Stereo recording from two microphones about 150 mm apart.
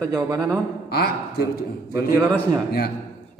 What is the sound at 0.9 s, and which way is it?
A man's voice, 90° left.